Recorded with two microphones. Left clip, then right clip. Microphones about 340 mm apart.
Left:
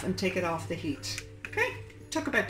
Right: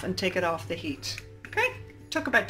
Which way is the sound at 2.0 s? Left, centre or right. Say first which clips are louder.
Right 4 dB; right.